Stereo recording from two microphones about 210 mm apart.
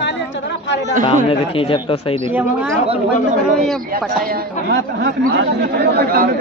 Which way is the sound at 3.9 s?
45° right (ahead or behind).